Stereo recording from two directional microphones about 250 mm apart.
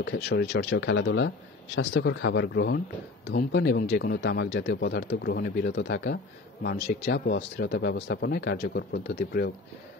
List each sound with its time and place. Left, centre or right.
0.0 s speech: left